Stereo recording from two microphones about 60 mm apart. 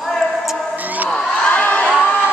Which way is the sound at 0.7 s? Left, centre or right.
Right.